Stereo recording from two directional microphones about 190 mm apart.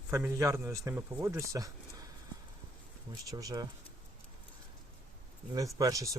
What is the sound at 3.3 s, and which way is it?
Speech, 20° right (ahead or behind).